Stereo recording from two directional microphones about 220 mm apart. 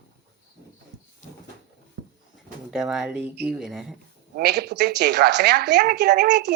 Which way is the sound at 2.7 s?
Centre (ahead or behind).